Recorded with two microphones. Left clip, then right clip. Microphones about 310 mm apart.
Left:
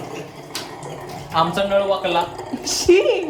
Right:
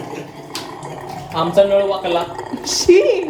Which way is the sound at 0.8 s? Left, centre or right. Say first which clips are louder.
Right 3 dB; centre.